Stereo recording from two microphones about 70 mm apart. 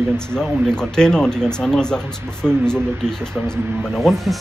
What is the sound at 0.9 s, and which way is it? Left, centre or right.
Speech, centre.